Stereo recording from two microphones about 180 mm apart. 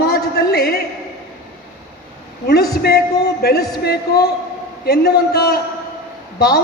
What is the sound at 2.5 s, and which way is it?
A woman's voice, 60° left (ahead or behind).